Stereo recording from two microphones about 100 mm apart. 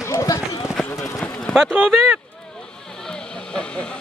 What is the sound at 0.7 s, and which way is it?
Speech, centre (ahead or behind).